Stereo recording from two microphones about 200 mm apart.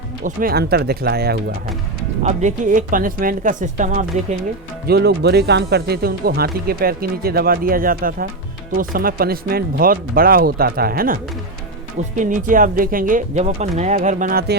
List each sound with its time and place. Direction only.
0.3 s speech: 45° right (ahead or behind)
2.2 s speech: 40° right (ahead or behind)
4.9 s speech: 55° right (ahead or behind)
12.2 s speech: 40° right (ahead or behind)